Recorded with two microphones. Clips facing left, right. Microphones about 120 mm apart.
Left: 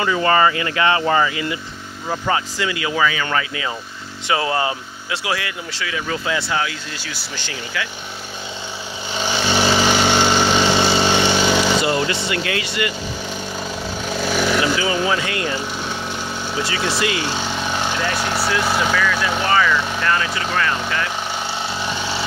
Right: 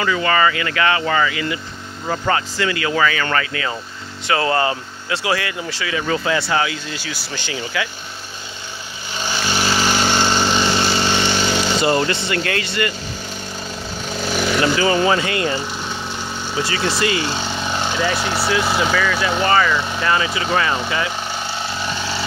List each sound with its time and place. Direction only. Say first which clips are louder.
0.0 s speech: left 1 dB; 25° left (ahead or behind)
2.0 s speech: right 1 dB; 10° left (ahead or behind); by 7.9 s 10° right (ahead or behind)
9.2 s vehicle: left 3 dB; 20° left (ahead or behind)
10.0 s lawn mower: left 2 dB; 10° left (ahead or behind)
11.5 s vehicle: left 3 dB; 90° left
11.8 s speech: right 2 dB; 10° left (ahead or behind)
14.0 s a sound: left 1 dB; 5° left (ahead or behind)
16.5 s speech: right 2 dB; 5° left (ahead or behind)
21.8 s vehicle: even; 10° left (ahead or behind)